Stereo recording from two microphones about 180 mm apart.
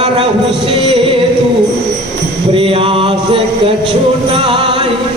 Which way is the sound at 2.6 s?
30° right (ahead or behind).